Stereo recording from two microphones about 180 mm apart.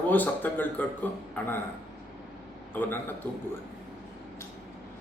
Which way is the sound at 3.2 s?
10° left (ahead or behind).